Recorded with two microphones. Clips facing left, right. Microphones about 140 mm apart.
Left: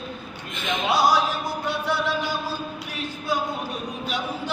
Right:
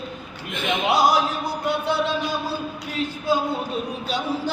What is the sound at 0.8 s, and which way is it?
Music, 20° right (ahead or behind).